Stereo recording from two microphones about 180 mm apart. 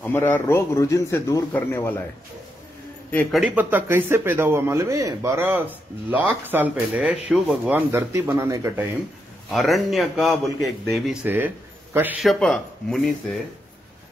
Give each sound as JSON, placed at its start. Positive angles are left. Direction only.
{"t": 0.0, "sound": "speech", "side_deg": 10}
{"t": 3.1, "sound": "speech", "side_deg": 5}
{"t": 9.5, "sound": "a man's voice", "side_deg": 0}
{"t": 11.2, "sound": "a man's voice", "side_deg": -10}